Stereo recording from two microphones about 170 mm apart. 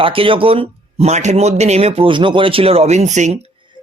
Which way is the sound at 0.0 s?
30° right (ahead or behind).